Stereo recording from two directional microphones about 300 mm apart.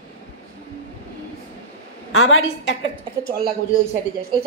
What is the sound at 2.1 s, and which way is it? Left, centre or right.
Speech, left.